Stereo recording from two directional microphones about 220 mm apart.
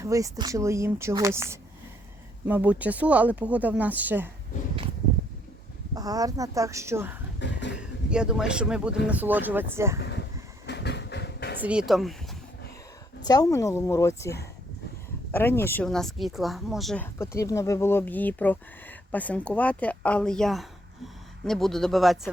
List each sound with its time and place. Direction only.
0.0 s speech: 15° right (ahead or behind)
5.9 s speech: 15° right (ahead or behind)
7.3 s a sound: 55° left (ahead or behind)
7.8 s speech: 5° right (ahead or behind)
10.0 s a sound: 50° left (ahead or behind)
10.7 s train: 50° left (ahead or behind)
11.6 s speech: 5° right (ahead or behind)
13.2 s speech: 15° left (ahead or behind); by 22.3 s centre (ahead or behind)